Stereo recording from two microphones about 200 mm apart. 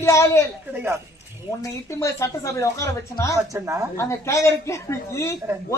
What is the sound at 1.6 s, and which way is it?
Speech, 15° left (ahead or behind).